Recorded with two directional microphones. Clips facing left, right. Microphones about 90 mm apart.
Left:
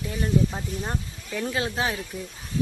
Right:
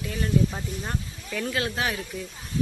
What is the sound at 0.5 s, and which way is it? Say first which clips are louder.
Speech: left 1 dB; 15° left (ahead or behind).